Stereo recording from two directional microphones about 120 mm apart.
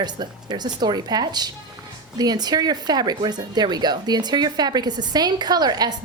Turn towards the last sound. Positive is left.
turn(degrees=-35)  # may be behind; listen again after turning